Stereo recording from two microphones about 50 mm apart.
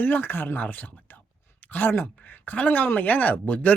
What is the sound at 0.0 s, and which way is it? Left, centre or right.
Speech, left.